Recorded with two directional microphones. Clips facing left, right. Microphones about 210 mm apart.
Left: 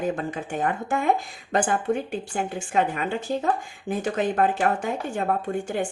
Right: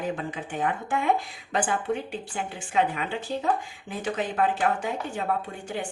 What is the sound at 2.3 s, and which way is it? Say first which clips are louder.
Speech: left 3 dB; 45° left (ahead or behind).